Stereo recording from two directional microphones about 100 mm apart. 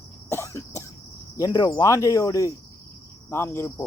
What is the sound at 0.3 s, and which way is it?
Cough, 30° left (ahead or behind).